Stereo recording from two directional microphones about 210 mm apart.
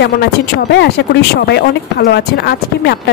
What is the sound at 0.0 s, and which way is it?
Speech, 55° left (ahead or behind).